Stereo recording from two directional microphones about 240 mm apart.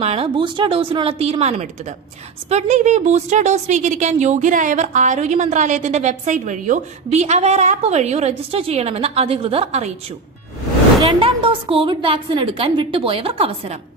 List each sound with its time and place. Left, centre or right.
0.0 s a woman's voice: right
11.0 s a woman's voice: right